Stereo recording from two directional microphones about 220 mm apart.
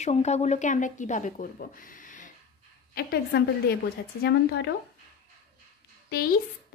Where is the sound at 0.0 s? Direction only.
30° left (ahead or behind); by 4.6 s 50° left (ahead or behind).